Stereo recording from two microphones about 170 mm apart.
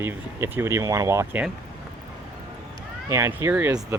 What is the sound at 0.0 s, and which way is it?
Speech, 15° right (ahead or behind).